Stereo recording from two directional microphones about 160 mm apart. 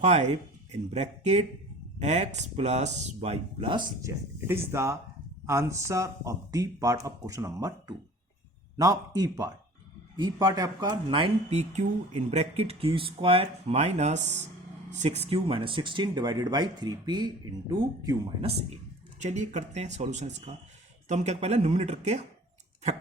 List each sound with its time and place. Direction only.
0.0 s speech: 45° right (ahead or behind); by 3.8 s 30° right (ahead or behind)
4.0 s speech: 15° right (ahead or behind); by 15.2 s 45° right (ahead or behind)
15.3 s speech: 35° right (ahead or behind)
19.2 s speech: 45° right (ahead or behind)